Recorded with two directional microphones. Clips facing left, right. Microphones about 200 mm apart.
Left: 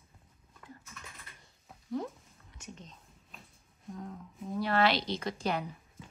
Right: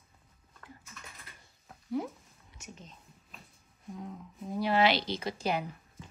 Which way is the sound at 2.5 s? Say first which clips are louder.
Left 1 dB; 5° right (ahead or behind).